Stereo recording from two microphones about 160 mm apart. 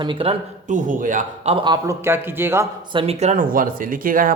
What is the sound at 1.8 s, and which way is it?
Speech, 15° right (ahead or behind).